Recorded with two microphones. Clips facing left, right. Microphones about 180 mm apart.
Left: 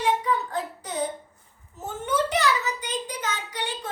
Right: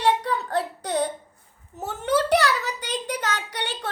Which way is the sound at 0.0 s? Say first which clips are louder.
Right 1 dB; 75° right (ahead or behind).